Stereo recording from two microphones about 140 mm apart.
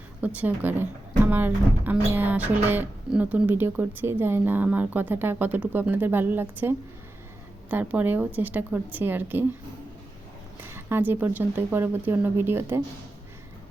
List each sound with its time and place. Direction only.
0.3 s speech: 10° right (ahead or behind)
10.6 s speech: 15° right (ahead or behind)